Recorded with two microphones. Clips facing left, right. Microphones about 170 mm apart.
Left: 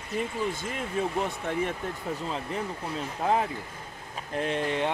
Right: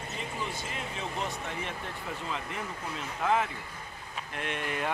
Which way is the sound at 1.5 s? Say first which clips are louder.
Left 9 dB; 55° left (ahead or behind).